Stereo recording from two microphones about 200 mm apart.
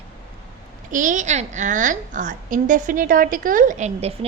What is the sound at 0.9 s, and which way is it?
A woman's voice, 40° right (ahead or behind).